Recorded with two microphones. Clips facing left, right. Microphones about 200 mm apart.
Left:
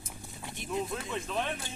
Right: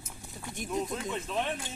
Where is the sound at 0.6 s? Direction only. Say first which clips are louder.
Right 2 dB; 45° right (ahead or behind).